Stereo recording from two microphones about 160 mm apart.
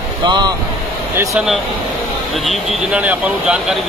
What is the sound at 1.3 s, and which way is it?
Speech, centre (ahead or behind).